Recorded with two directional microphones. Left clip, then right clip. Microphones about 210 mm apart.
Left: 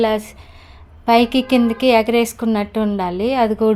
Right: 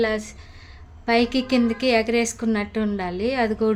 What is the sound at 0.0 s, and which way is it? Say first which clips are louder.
A woman's voice: left 5 dB; 20° left (ahead or behind).